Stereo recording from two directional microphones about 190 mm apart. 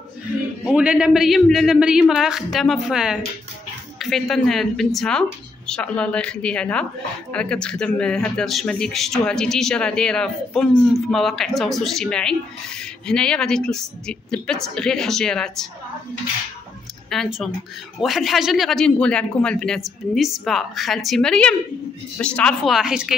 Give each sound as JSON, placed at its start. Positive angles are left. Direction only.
{"t": 0.7, "sound": "a man's voice", "side_deg": -5}
{"t": 17.1, "sound": "a man's voice", "side_deg": 0}